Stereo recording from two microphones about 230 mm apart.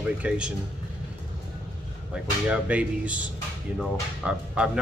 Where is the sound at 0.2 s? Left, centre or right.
Centre.